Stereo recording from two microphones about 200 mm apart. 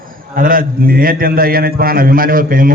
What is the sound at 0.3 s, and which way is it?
A man's voice, 45° right (ahead or behind).